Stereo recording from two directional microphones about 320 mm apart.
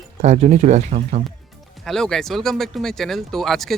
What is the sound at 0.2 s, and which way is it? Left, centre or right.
Speech, right.